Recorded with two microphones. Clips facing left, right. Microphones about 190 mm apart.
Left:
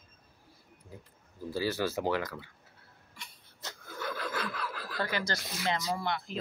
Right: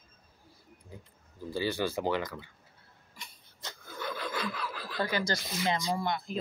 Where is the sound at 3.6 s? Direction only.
5° left (ahead or behind).